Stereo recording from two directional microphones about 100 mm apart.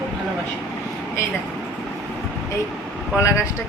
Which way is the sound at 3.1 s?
30° left (ahead or behind).